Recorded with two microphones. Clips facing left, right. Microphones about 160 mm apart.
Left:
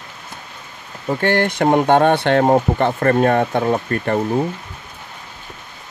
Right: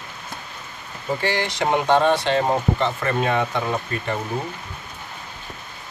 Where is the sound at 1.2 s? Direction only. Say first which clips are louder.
Left 8 dB; 55° left (ahead or behind).